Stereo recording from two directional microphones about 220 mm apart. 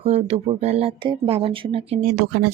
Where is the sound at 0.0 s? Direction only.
30° right (ahead or behind).